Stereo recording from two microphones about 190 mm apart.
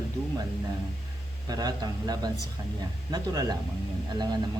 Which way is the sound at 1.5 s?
20° right (ahead or behind).